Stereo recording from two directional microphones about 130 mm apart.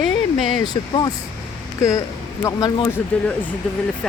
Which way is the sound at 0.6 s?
30° left (ahead or behind).